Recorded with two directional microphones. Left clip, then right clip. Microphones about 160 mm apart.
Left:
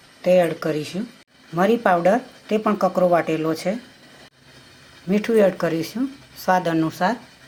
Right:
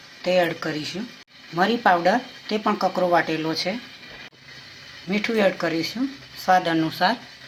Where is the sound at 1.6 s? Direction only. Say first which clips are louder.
Left 1 dB; 55° left (ahead or behind).